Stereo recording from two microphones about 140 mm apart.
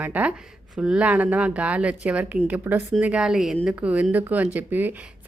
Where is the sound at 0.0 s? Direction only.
10° right (ahead or behind).